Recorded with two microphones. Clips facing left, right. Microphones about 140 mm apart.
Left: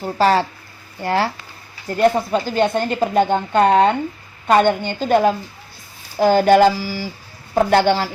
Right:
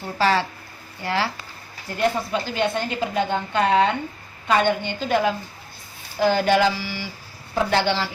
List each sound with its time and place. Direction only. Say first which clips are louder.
0.0 s speech: left 5 dB; 40° left (ahead or behind)